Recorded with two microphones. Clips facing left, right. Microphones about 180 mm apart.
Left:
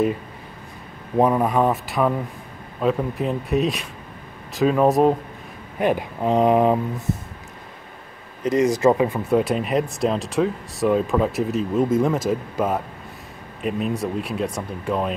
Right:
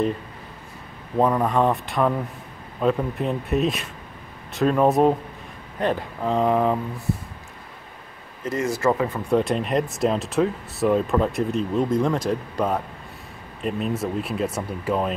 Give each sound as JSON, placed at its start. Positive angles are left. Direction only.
{"t": 1.1, "sound": "speech", "side_deg": 10}
{"t": 5.8, "sound": "speech", "side_deg": 15}
{"t": 8.5, "sound": "speech", "side_deg": 15}